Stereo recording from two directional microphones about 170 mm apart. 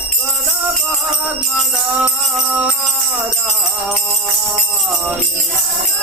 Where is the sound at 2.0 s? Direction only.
5° right (ahead or behind).